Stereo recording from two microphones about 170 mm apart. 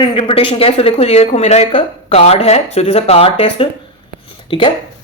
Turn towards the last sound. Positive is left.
turn(degrees=30)  # may be behind; listen again after turning